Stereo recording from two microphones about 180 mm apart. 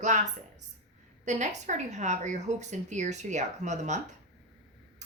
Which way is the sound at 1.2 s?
40° right (ahead or behind).